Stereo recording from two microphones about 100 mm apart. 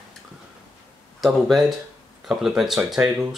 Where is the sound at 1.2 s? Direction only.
Centre (ahead or behind).